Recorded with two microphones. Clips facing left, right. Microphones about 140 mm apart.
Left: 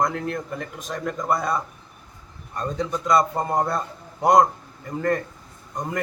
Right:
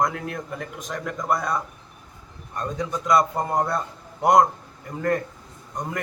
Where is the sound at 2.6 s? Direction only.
Centre (ahead or behind).